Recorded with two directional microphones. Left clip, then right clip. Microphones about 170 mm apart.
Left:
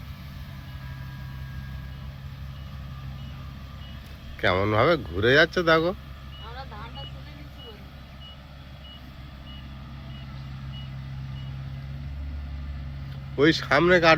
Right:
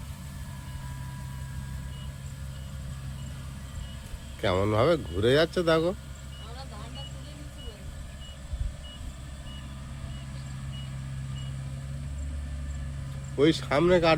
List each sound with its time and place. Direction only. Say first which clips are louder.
4.4 s speech: left 3 dB; 10° right (ahead or behind)
13.3 s speech: left 3 dB; 5° right (ahead or behind)